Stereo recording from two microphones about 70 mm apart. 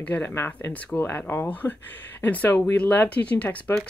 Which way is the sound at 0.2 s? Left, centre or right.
Left.